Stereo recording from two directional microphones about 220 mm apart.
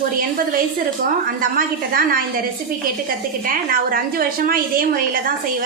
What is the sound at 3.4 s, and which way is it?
A woman's voice, 40° right (ahead or behind).